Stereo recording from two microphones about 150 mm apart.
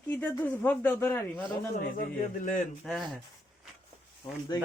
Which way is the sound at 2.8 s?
Centre (ahead or behind).